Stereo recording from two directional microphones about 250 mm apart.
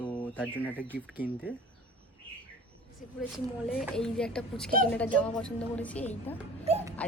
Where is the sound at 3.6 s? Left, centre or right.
Centre.